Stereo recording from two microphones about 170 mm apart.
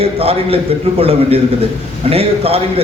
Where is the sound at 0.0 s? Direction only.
35° right (ahead or behind).